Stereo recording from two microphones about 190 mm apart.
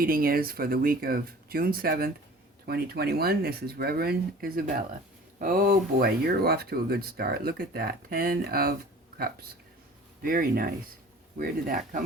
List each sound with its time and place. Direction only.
0.0 s speech: 50° right (ahead or behind)
10.2 s speech: 50° right (ahead or behind)